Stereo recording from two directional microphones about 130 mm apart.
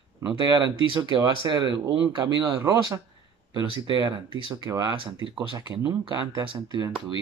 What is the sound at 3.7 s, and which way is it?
Speech, 35° right (ahead or behind).